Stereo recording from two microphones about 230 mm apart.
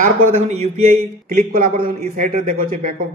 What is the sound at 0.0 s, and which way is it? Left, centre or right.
Speech, right.